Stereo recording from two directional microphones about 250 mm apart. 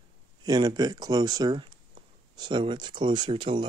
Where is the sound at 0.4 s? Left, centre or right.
Centre.